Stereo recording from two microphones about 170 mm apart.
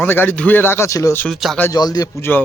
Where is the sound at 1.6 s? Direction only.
25° left (ahead or behind).